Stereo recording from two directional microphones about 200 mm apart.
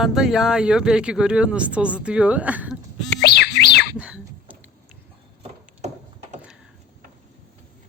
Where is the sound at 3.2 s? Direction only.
55° left (ahead or behind).